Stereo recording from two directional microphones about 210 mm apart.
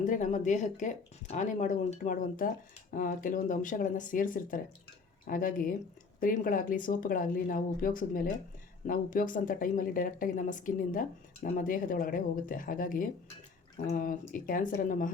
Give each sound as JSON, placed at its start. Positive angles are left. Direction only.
{"t": 0.0, "sound": "speech", "side_deg": 35}